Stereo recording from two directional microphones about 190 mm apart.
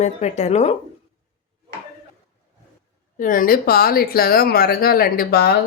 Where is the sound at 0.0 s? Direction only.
35° left (ahead or behind).